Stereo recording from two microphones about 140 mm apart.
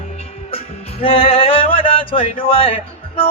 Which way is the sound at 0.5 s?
45° left (ahead or behind).